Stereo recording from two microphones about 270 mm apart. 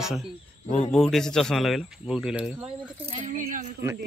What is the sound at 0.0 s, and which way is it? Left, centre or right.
Speech, centre.